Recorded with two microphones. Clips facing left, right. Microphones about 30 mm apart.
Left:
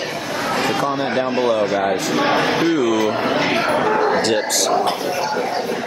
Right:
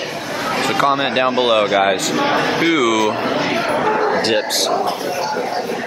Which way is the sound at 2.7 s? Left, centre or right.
Right.